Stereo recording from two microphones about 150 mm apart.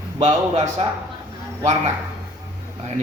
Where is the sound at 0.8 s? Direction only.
45° right (ahead or behind).